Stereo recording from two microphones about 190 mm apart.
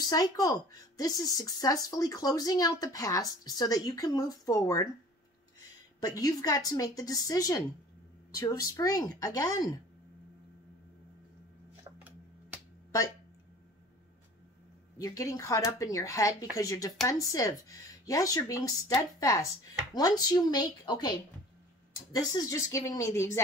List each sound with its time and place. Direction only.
0.0 s speech: 20° left (ahead or behind)
5.9 s speech: 20° left (ahead or behind)
15.0 s speech: 15° left (ahead or behind)